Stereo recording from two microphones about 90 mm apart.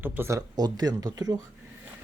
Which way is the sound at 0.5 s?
50° right (ahead or behind).